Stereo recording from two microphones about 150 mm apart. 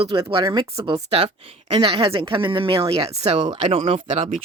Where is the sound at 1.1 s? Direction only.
40° right (ahead or behind).